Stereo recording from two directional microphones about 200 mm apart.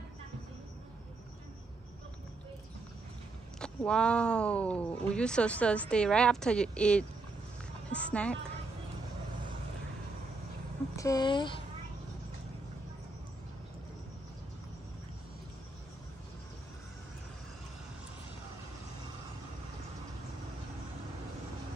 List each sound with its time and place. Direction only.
3.5 s speech: 5° left (ahead or behind)
11.0 s speech: 20° left (ahead or behind)